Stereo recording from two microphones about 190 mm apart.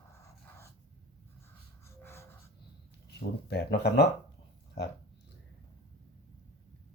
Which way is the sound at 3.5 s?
55° left (ahead or behind).